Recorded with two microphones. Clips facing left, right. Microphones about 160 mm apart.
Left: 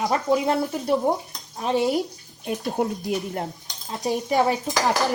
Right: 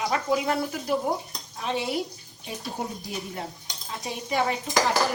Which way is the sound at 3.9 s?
40° left (ahead or behind).